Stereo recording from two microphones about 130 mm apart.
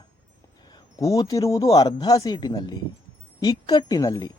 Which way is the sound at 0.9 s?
25° left (ahead or behind).